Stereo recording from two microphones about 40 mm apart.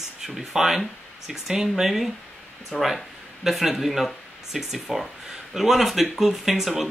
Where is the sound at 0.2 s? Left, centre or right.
Centre.